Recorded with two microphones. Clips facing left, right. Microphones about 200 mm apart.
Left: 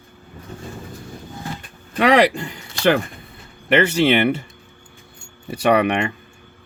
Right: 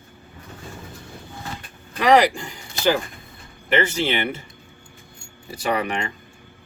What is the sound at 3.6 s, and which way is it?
Speech, 65° left (ahead or behind).